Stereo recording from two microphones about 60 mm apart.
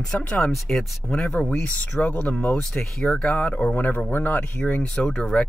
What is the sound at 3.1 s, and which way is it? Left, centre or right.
Speech, centre.